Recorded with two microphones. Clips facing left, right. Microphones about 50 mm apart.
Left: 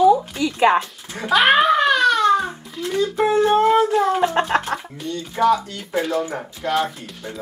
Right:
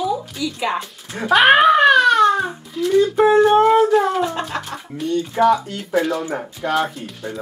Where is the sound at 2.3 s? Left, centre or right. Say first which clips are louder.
Left 1 dB; centre.